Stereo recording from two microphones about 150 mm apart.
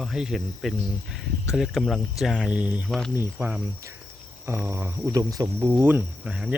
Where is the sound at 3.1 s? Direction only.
15° right (ahead or behind).